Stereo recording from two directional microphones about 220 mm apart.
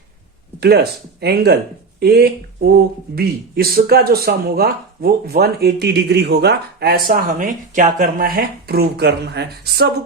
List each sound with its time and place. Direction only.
0.6 s speech: 45° right (ahead or behind)